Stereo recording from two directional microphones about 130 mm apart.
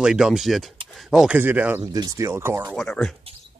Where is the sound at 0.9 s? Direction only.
Centre (ahead or behind).